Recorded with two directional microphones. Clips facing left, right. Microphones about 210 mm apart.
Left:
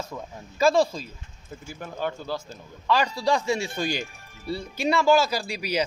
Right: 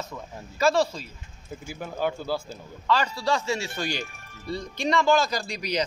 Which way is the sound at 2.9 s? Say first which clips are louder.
Left 2 dB; 15° left (ahead or behind).